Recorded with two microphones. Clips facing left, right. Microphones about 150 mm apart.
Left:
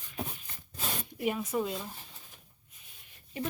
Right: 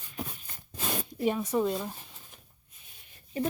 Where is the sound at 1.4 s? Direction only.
35° right (ahead or behind).